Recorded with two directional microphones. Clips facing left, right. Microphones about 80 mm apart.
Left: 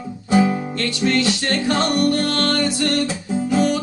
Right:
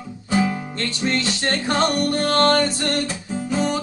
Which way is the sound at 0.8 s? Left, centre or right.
Right.